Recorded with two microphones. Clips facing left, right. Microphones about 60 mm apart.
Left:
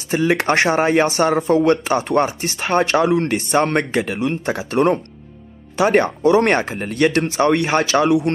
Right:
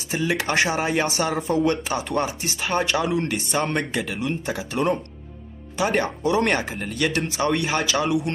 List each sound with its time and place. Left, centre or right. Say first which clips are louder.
0.1 s speech: left 6 dB; left